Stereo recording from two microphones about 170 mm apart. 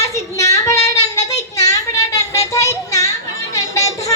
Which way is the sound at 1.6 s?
20° left (ahead or behind).